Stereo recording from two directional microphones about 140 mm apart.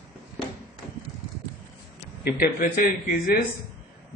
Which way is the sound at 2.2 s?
85° left.